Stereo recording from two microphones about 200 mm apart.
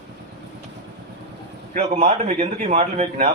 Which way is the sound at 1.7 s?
35° right (ahead or behind).